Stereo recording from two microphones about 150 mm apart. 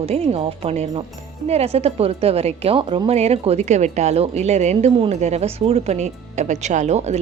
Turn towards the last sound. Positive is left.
turn(degrees=-50)  # may be behind; listen again after turning